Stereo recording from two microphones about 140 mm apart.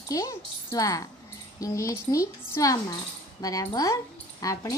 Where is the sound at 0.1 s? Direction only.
20° left (ahead or behind).